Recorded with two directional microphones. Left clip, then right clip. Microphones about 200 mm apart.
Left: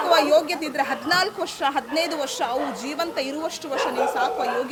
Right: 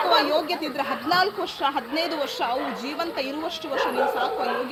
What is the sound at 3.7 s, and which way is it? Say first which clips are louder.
Speech: even; 15° left (ahead or behind).